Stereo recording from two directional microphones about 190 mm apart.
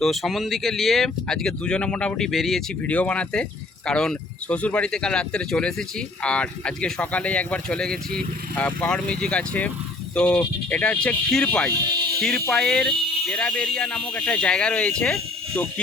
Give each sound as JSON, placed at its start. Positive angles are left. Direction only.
{"t": 0.0, "sound": "speech", "side_deg": 0}
{"t": 11.8, "sound": "a sound", "side_deg": -20}
{"t": 12.2, "sound": "speech", "side_deg": 0}